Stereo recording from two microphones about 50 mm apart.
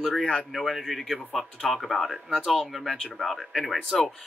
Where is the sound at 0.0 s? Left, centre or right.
Centre.